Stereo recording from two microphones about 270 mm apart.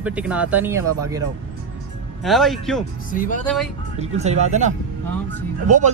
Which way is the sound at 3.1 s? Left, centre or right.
Left.